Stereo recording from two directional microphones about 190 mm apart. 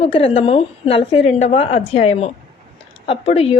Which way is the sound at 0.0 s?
30° left (ahead or behind).